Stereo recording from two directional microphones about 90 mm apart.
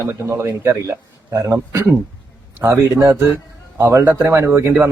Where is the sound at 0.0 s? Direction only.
35° right (ahead or behind).